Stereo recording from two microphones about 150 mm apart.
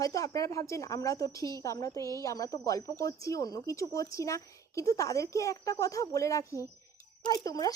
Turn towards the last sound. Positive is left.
turn(degrees=25)  # may be behind; listen again after turning